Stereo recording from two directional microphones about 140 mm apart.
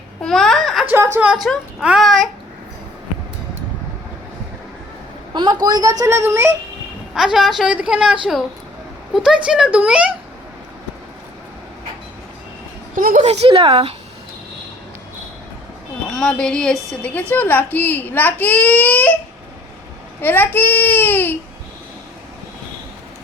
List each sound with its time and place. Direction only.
0.2 s a sound: centre (ahead or behind)
0.9 s a sound: 20° right (ahead or behind)
1.2 s a woman's voice: 5° right (ahead or behind)
5.3 s a woman's voice: 30° right (ahead or behind)
7.1 s a woman's voice: 5° right (ahead or behind)
13.0 s a woman's voice: 75° right (ahead or behind)
13.2 s speech: 45° right (ahead or behind)
16.0 s a child's voice: 5° left (ahead or behind)
20.2 s a child's voice: 15° left (ahead or behind)